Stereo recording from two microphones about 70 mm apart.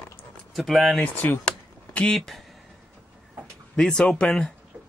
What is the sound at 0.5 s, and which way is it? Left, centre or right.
Speech, centre.